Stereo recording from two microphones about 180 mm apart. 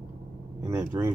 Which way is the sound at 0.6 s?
15° right (ahead or behind).